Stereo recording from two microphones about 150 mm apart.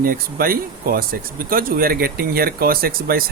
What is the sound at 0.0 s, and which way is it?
Speech, 80° right.